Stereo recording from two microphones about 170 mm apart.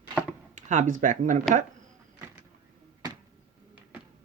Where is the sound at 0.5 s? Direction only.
50° right (ahead or behind).